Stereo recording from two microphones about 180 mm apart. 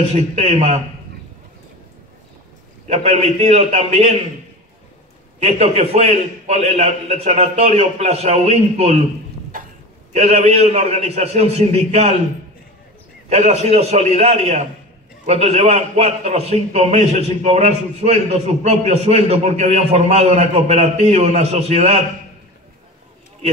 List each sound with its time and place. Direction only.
0.1 s a man's voice: 35° right (ahead or behind)
2.9 s a man's voice: 35° right (ahead or behind)
5.4 s a man's voice: 35° right (ahead or behind)
9.5 s cough: 50° right (ahead or behind)
10.1 s a man's voice: 35° right (ahead or behind)
13.3 s a man's voice: 35° right (ahead or behind)